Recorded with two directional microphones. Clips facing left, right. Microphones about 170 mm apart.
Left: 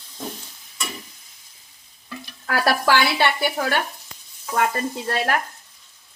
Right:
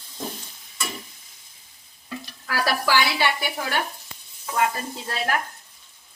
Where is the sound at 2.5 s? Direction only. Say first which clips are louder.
Left 4 dB; 55° left (ahead or behind).